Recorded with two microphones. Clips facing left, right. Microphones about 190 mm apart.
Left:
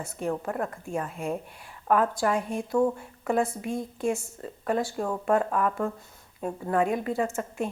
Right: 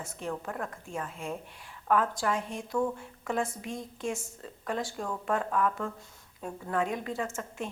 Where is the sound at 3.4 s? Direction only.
65° left (ahead or behind).